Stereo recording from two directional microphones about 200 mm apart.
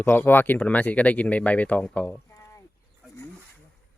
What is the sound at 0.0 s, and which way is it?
Speech, 10° left (ahead or behind).